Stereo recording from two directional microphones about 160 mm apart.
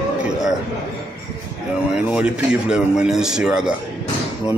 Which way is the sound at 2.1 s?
5° right (ahead or behind).